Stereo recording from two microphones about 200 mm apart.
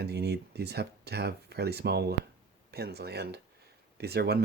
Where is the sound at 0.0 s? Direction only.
55° right (ahead or behind).